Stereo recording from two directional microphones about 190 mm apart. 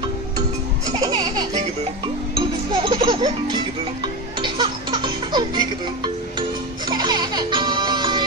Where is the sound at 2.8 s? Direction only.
25° right (ahead or behind).